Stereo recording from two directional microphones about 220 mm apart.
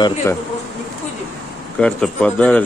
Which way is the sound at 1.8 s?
5° left (ahead or behind).